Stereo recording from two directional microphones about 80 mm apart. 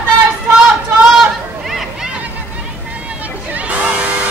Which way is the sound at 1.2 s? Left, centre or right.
Centre.